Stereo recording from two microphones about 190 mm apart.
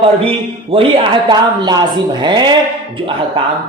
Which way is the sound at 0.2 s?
30° right (ahead or behind).